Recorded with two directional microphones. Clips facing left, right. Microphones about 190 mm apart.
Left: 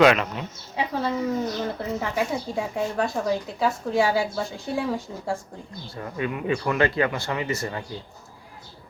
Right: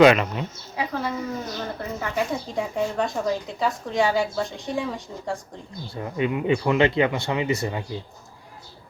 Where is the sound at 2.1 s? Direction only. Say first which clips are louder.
Right 3 dB; 5° left (ahead or behind).